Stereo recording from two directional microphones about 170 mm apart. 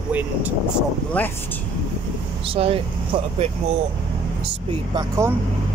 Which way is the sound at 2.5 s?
35° right (ahead or behind).